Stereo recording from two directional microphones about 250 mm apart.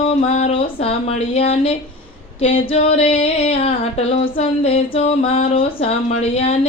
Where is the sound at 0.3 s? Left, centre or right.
Left.